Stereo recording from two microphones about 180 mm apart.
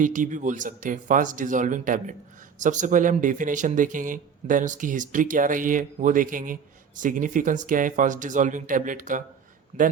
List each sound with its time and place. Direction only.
0.0 s a man's voice: 45° right (ahead or behind)